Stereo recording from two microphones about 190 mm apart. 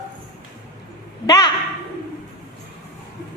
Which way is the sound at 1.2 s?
20° left (ahead or behind).